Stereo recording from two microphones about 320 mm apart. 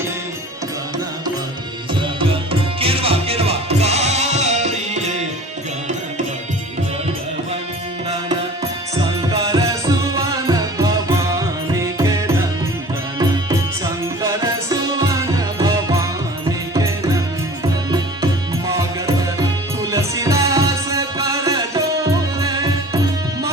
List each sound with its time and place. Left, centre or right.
2.0 s music: centre
9.0 s music: centre